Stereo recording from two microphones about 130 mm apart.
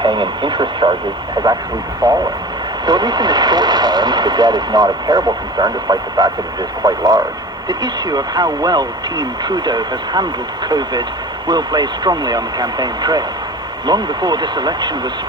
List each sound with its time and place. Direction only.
0.0 s speech: 40° right (ahead or behind)
2.0 s speech: 35° right (ahead or behind)